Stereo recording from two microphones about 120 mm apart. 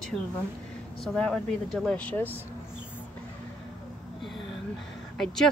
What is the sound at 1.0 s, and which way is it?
Speech, centre (ahead or behind).